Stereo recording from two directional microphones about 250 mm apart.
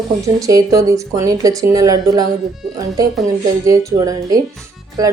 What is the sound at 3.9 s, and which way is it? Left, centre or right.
Speech, centre.